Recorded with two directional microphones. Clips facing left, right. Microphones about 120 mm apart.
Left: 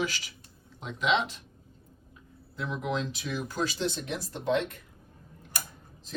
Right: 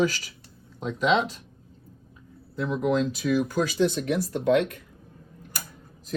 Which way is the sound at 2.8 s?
40° right (ahead or behind).